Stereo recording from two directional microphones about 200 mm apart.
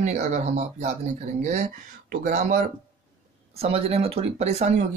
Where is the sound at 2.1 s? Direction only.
40° right (ahead or behind).